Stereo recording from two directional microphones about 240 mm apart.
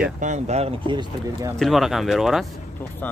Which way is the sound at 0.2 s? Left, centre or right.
Right.